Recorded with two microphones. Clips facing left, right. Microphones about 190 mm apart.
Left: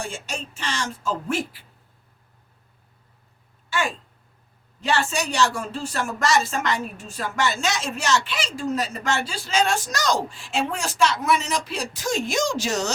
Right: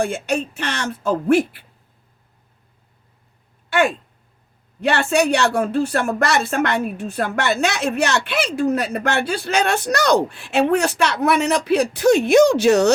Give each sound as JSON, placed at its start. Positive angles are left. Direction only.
{"t": 0.0, "sound": "speech", "side_deg": -60}
{"t": 3.7, "sound": "speech", "side_deg": -60}